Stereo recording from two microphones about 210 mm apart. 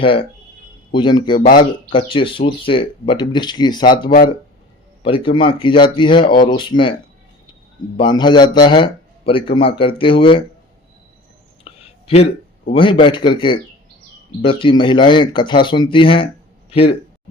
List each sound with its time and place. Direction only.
0.0 s speech: 25° left (ahead or behind)
5.0 s speech: 25° left (ahead or behind)
7.9 s speech: 20° left (ahead or behind)
11.6 s a sound: 30° left (ahead or behind)
12.7 s speech: 25° left (ahead or behind)